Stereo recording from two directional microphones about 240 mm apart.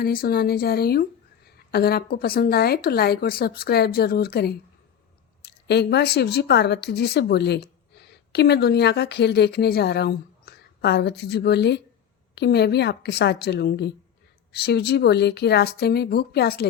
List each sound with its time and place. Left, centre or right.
0.0 s a woman's voice: left